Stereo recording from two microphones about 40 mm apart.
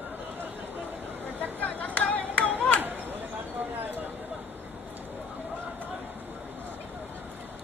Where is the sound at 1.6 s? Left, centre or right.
Left.